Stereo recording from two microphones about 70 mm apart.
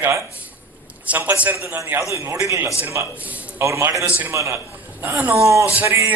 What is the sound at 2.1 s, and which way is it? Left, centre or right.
Speech, right.